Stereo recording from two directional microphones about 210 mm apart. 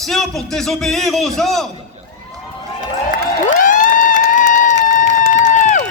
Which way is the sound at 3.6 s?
40° left (ahead or behind).